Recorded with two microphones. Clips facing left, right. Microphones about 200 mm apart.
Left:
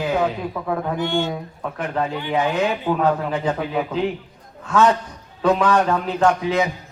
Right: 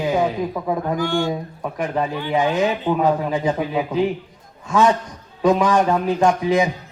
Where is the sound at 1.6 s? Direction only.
15° right (ahead or behind).